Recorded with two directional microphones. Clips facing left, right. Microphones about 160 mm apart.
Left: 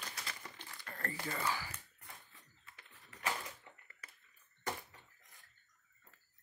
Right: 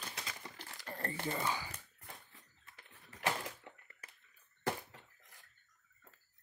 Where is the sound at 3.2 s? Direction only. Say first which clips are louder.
Right 3 dB; 90° right.